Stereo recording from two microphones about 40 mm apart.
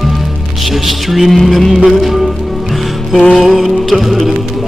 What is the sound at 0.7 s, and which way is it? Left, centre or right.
Music, centre.